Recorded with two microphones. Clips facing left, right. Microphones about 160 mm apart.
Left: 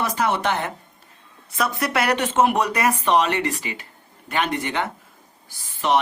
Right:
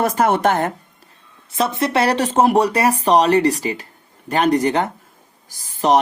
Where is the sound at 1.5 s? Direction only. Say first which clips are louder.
Right 5 dB; 25° right (ahead or behind).